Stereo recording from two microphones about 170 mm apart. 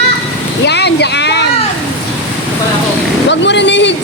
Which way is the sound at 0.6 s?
85° left.